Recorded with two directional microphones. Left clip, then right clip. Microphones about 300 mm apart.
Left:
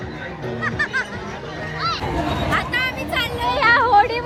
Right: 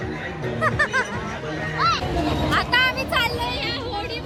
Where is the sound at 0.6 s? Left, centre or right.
Centre.